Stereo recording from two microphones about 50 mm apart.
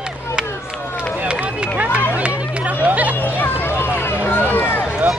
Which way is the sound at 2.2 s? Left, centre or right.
Right.